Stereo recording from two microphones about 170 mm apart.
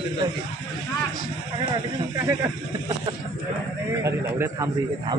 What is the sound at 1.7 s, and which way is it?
Speech, 20° right (ahead or behind).